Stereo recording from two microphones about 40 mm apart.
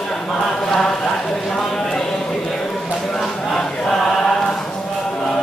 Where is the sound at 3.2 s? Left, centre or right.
Centre.